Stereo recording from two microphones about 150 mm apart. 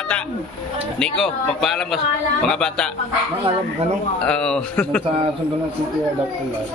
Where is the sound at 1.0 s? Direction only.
5° left (ahead or behind).